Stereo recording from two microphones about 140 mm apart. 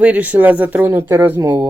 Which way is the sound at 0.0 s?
10° right (ahead or behind).